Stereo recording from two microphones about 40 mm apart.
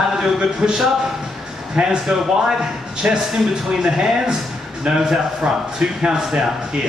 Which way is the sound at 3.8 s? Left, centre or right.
Centre.